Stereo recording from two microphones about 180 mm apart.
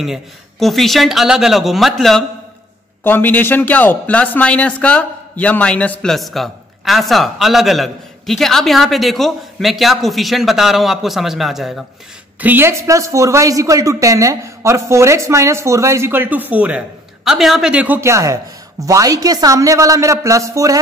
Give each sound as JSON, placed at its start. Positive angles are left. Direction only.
{"t": 0.0, "sound": "a man's voice", "side_deg": 0}
{"t": 3.0, "sound": "a man's voice", "side_deg": 10}